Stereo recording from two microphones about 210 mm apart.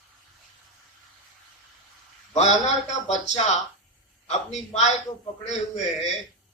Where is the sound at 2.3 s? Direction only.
30° left (ahead or behind).